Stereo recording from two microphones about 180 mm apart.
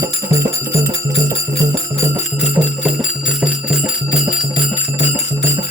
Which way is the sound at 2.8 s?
5° right (ahead or behind).